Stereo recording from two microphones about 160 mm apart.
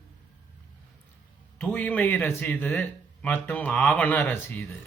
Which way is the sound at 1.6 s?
10° left (ahead or behind).